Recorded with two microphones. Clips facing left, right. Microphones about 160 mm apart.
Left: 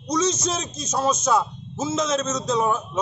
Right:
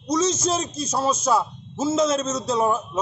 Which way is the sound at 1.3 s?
5° right (ahead or behind).